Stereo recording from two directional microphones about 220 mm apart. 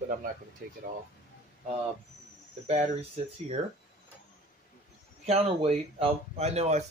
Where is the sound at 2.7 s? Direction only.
30° right (ahead or behind).